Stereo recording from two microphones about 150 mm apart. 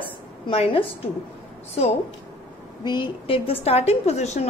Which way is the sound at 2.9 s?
35° left (ahead or behind).